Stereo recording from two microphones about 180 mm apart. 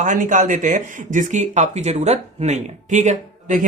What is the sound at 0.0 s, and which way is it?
Speech, 45° right (ahead or behind).